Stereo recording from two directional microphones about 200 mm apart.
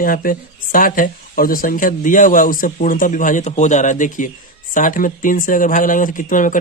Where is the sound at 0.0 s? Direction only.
45° left (ahead or behind).